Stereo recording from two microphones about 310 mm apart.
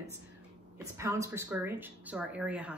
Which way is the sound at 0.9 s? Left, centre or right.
Centre.